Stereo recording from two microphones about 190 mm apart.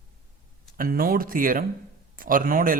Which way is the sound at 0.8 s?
50° right (ahead or behind).